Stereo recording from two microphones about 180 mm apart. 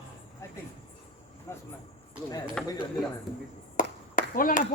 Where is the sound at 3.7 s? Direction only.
50° left (ahead or behind).